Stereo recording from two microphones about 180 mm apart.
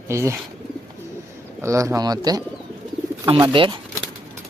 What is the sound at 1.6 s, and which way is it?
Speech, 15° right (ahead or behind).